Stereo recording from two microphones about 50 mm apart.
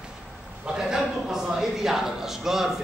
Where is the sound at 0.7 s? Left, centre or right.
Centre.